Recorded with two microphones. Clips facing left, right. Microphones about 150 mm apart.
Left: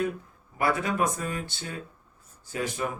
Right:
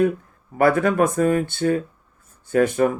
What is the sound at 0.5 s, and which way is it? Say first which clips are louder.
Speech: right 9 dB; 55° right (ahead or behind).